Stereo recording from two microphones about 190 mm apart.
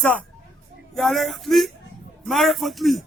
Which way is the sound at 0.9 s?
Centre (ahead or behind).